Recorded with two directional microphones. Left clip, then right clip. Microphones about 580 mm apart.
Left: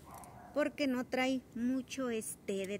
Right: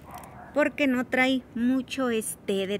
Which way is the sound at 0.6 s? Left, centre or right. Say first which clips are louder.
Right 10 dB; left.